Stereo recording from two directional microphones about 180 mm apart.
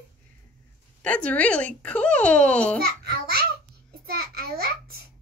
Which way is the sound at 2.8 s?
60° right (ahead or behind).